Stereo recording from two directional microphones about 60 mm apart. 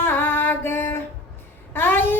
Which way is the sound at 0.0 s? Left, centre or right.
Left.